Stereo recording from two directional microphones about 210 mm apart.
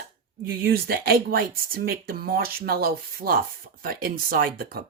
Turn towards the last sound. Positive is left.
turn(degrees=-45)  # may be behind; listen again after turning